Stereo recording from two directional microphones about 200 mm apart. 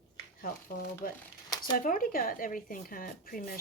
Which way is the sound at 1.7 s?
45° left (ahead or behind).